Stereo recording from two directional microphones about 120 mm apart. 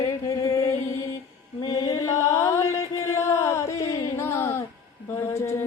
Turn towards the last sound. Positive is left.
turn(degrees=20)  # may be behind; listen again after turning